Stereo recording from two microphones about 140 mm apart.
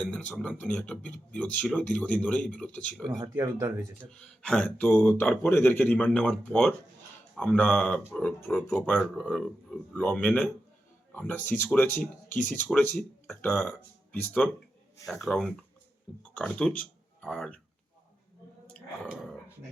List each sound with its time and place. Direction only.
0.1 s speech: 10° left (ahead or behind)
3.3 s speech: 20° right (ahead or behind)
4.0 s speech: 5° left (ahead or behind)